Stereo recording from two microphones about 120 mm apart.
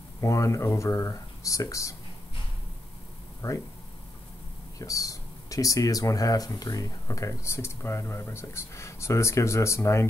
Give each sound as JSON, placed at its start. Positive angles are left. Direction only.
{"t": 0.2, "sound": "speech", "side_deg": 25}
{"t": 3.4, "sound": "speech", "side_deg": 25}
{"t": 4.7, "sound": "speech", "side_deg": 30}